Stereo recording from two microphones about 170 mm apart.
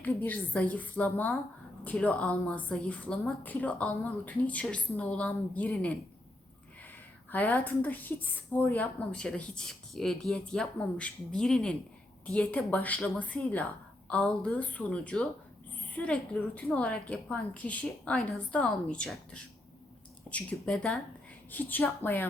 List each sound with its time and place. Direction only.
0.0 s a woman's voice: 10° left (ahead or behind)
7.3 s a woman's voice: 10° left (ahead or behind)